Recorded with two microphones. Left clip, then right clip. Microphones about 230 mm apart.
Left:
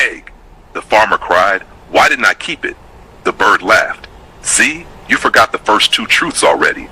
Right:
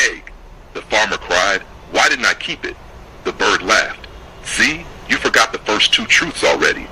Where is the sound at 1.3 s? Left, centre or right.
Left.